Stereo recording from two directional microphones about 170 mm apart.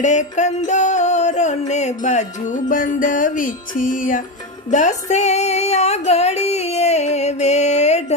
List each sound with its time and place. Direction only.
0.0 s music: 45° left (ahead or behind)